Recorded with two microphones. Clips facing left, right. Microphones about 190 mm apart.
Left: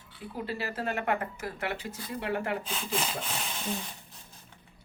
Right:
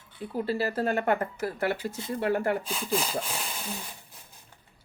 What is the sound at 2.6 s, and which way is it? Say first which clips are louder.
Sawing: right 3 dB; 5° right (ahead or behind).